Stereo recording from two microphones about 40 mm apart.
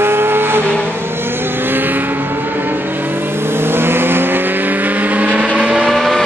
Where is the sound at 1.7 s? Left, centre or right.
Right.